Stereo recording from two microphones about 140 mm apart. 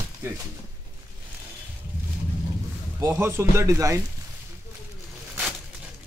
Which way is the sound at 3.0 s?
15° right (ahead or behind).